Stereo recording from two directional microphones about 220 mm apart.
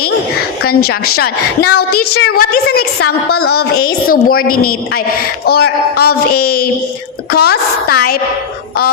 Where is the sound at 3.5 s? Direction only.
45° left (ahead or behind).